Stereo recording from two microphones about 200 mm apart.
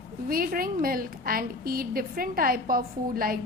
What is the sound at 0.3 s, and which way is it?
A woman's voice, 45° right (ahead or behind).